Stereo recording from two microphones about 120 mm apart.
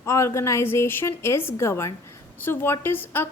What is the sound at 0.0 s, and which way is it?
A woman's voice, 25° left (ahead or behind).